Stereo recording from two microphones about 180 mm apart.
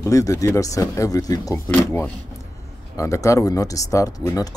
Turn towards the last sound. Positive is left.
turn(degrees=20)  # may be behind; listen again after turning